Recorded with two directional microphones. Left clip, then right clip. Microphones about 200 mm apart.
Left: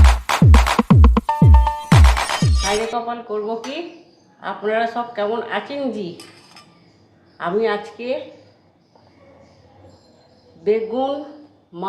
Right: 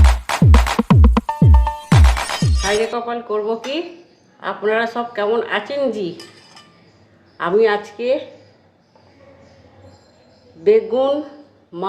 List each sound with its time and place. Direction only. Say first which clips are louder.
0.0 s music: left 1 dB; centre (ahead or behind)
2.9 s speech: right 2 dB; 35° right (ahead or behind)
7.3 s speech: right 5 dB; 35° right (ahead or behind)
10.6 s speech: right 5 dB; 35° right (ahead or behind)